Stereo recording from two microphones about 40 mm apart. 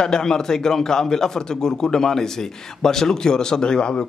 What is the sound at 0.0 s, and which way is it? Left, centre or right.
A man's voice, centre.